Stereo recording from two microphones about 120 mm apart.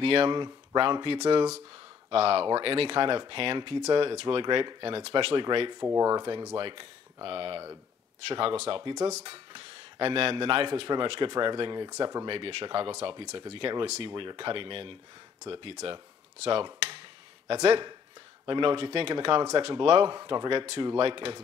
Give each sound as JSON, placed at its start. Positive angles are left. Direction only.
{"t": 0.0, "sound": "speech", "side_deg": -50}
{"t": 2.0, "sound": "a man's voice", "side_deg": -50}
{"t": 5.3, "sound": "speech", "side_deg": -45}
{"t": 5.9, "sound": "speech", "side_deg": -30}
{"t": 6.5, "sound": "a man's voice", "side_deg": -45}
{"t": 12.3, "sound": "a man's voice", "side_deg": -50}
{"t": 15.7, "sound": "speech", "side_deg": -65}
{"t": 16.4, "sound": "dishes", "side_deg": -45}
{"t": 17.5, "sound": "a man's voice", "side_deg": -55}
{"t": 18.4, "sound": "a man's voice", "side_deg": -45}